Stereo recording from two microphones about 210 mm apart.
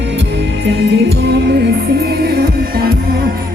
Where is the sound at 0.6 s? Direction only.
55° right (ahead or behind).